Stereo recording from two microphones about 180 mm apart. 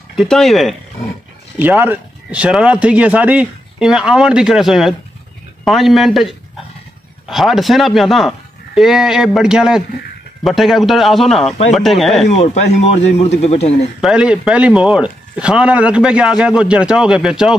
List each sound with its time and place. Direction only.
0.1 s speech: centre (ahead or behind)
1.6 s speech: 10° right (ahead or behind)
12.3 s speech: 35° left (ahead or behind)
14.0 s speech: 5° right (ahead or behind)